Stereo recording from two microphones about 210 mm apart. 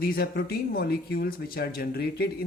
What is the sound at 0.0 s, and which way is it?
Speech, 45° left (ahead or behind).